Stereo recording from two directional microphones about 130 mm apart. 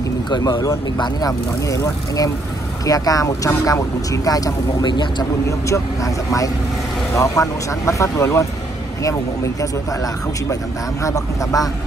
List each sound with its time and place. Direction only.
0.3 s speech: 30° left (ahead or behind)
10.5 s speech: 25° left (ahead or behind)